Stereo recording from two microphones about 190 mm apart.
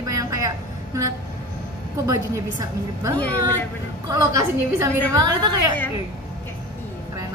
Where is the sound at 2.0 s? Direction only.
20° right (ahead or behind).